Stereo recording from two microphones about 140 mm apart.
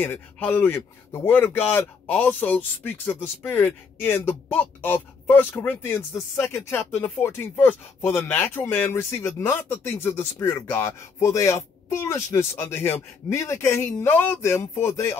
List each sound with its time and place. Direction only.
0.0 s speech: 10° left (ahead or behind)